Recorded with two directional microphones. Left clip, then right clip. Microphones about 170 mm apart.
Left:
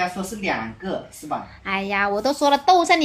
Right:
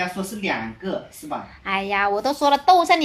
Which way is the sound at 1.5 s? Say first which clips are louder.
Right 3 dB; 15° left (ahead or behind).